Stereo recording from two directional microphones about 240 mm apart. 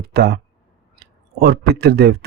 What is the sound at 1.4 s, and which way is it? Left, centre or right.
Speech, right.